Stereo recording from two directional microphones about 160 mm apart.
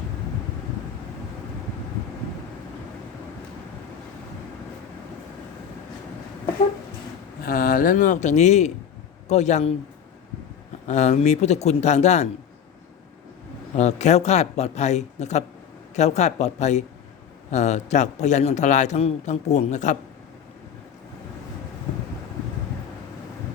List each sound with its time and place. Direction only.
7.4 s a man's voice: 65° left (ahead or behind); by 9.7 s 45° left (ahead or behind)
10.8 s a man's voice: 45° left (ahead or behind)
13.7 s a man's voice: 45° left (ahead or behind)